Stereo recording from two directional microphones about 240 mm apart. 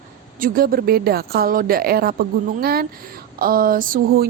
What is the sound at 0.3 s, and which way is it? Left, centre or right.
Speech, right.